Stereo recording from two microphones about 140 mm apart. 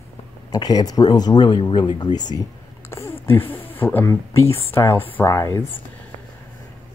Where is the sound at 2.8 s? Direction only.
20° left (ahead or behind).